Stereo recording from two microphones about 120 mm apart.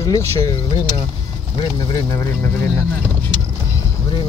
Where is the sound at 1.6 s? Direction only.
30° left (ahead or behind).